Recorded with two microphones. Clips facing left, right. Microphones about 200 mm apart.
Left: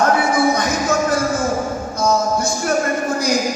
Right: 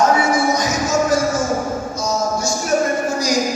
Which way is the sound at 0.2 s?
55° left (ahead or behind).